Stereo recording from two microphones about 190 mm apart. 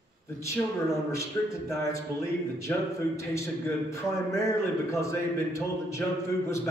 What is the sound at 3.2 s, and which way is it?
A man's voice, 15° left (ahead or behind).